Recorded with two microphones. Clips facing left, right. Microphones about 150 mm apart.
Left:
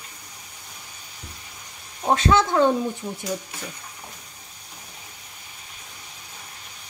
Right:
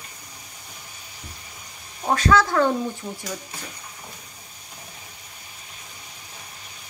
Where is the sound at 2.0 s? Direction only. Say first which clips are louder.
Even; 25° left (ahead or behind).